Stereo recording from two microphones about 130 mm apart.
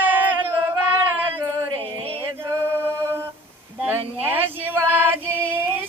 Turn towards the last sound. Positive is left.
turn(degrees=-15)  # may be behind; listen again after turning